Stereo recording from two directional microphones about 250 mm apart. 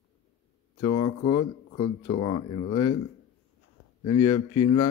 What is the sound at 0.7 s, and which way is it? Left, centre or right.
Speech, left.